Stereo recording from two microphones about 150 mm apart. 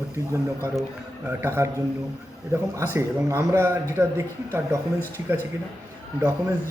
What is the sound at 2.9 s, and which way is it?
A man's voice, 20° right (ahead or behind).